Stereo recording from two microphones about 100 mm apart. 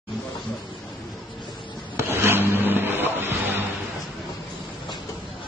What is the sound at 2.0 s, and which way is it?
Vehicle, 25° right (ahead or behind).